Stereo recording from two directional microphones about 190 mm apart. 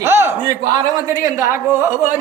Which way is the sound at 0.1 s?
10° right (ahead or behind).